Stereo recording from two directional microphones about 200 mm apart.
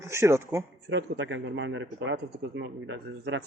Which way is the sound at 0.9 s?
60° right (ahead or behind).